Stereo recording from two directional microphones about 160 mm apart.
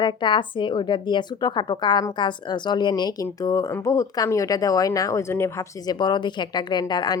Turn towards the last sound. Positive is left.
turn(degrees=25)  # may be behind; listen again after turning